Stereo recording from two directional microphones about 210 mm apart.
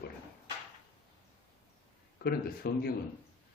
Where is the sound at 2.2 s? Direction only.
45° left (ahead or behind).